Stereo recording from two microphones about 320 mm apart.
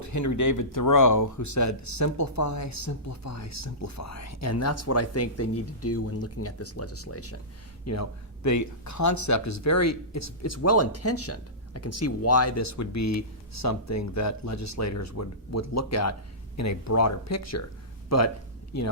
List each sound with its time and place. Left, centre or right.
0.0 s speech: left